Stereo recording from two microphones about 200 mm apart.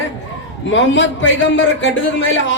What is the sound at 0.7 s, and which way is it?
A man's voice, 65° left (ahead or behind).